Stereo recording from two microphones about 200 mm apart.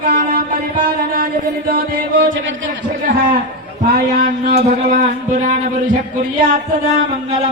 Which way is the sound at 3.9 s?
50° right (ahead or behind).